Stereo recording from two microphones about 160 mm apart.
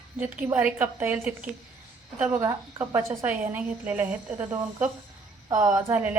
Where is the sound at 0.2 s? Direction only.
10° right (ahead or behind).